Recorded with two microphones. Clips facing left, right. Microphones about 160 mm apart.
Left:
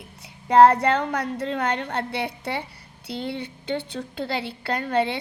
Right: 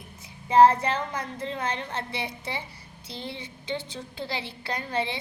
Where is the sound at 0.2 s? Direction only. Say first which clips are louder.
Left 3 dB; 65° left (ahead or behind).